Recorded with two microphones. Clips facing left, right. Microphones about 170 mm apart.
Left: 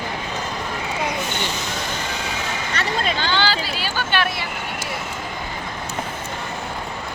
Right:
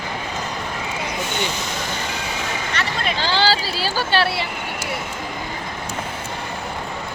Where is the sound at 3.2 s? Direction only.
35° right (ahead or behind).